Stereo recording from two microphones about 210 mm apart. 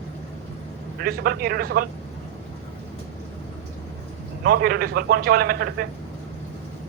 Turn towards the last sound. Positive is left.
turn(degrees=-45)  # may be behind; listen again after turning